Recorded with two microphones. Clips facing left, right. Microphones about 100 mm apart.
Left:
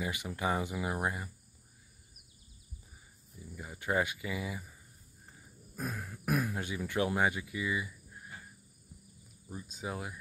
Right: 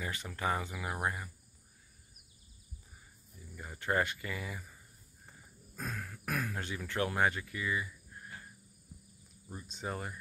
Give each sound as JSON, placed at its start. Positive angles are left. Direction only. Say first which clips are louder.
{"t": 0.0, "sound": "speech", "louder": "left 2 dB", "side_deg": 15}
{"t": 3.5, "sound": "speech", "louder": "even", "side_deg": 5}
{"t": 5.8, "sound": "speech", "louder": "left 2 dB", "side_deg": 15}
{"t": 9.5, "sound": "speech", "louder": "even", "side_deg": 5}